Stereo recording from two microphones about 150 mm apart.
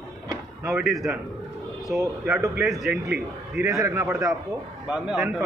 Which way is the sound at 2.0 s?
20° right (ahead or behind).